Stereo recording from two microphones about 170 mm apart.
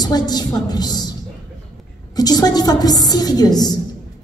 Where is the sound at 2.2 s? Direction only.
20° left (ahead or behind).